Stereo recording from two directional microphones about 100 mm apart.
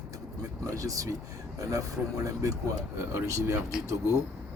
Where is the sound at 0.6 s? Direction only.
35° right (ahead or behind).